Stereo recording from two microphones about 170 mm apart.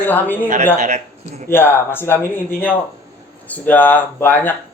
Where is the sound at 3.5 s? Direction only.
10° left (ahead or behind).